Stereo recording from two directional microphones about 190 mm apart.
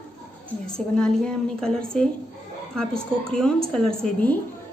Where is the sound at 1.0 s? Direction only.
5° left (ahead or behind).